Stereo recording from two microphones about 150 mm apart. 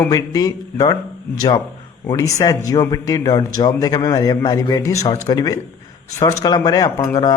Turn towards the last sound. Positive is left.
turn(degrees=25)  # may be behind; listen again after turning